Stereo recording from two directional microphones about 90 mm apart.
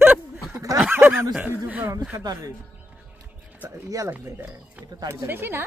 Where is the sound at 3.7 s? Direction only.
35° right (ahead or behind).